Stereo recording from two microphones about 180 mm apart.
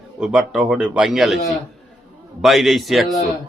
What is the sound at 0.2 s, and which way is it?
A man's voice, 5° right (ahead or behind).